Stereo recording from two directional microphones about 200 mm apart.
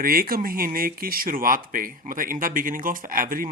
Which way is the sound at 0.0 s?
45° right (ahead or behind).